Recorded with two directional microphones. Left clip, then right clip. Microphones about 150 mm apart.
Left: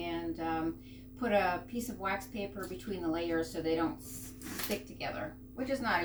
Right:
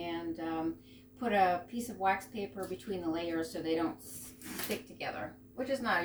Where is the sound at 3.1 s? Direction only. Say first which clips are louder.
Left 2 dB; 15° right (ahead or behind).